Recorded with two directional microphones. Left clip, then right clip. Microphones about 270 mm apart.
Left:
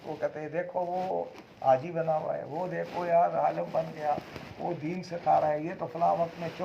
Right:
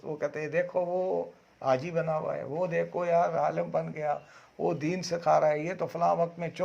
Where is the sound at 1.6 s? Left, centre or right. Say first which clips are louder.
Left 2 dB; right.